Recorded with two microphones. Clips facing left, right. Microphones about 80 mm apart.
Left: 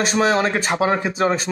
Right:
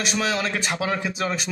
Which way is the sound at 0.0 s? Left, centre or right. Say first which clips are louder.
Left 7 dB; left.